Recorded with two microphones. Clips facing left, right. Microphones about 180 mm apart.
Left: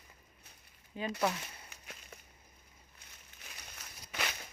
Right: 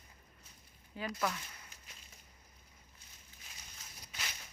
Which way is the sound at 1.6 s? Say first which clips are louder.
Left 7 dB; 65° left (ahead or behind).